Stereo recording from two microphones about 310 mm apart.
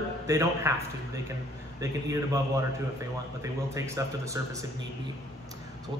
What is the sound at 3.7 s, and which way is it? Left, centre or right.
Speech, centre.